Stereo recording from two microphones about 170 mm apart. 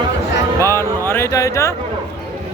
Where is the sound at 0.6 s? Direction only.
15° left (ahead or behind).